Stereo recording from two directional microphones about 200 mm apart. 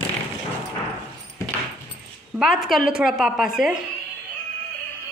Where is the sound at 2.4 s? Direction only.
Centre (ahead or behind).